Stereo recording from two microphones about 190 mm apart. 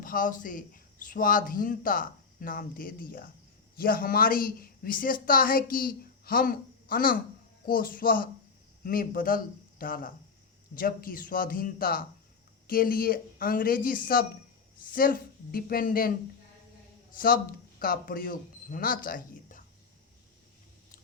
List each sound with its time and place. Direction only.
0.0 s a woman's voice: 45° left (ahead or behind)
17.2 s speech: 50° left (ahead or behind)